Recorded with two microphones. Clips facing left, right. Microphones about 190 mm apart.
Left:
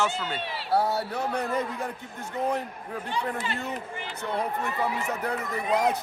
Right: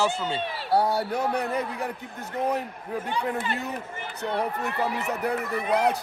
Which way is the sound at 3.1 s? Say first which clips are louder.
Right 1 dB; 55° right (ahead or behind).